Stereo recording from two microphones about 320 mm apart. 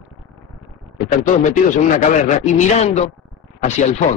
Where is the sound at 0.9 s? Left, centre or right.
Left.